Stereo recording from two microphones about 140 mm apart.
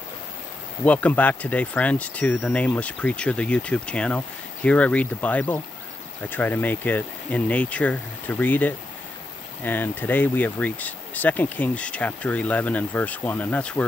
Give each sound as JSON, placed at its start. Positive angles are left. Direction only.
{"t": 0.8, "sound": "speech", "side_deg": 10}